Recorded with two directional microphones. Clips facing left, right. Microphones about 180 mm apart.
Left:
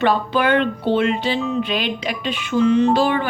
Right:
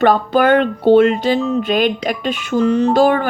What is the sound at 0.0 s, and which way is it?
A woman's voice, 45° right (ahead or behind).